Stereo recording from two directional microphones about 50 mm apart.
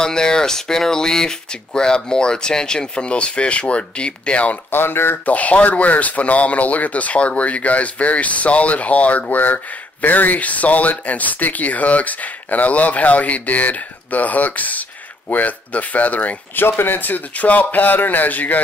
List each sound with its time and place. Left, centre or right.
0.0 s speech: centre
4.6 s speech: left
5.2 s speech: left
16.6 s speech: left